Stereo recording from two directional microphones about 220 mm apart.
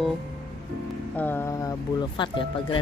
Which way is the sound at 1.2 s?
10° left (ahead or behind).